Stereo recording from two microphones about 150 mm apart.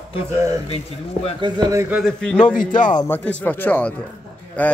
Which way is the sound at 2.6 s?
60° left (ahead or behind).